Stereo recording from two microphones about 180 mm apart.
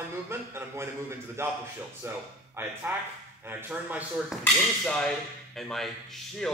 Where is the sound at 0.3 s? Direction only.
15° right (ahead or behind).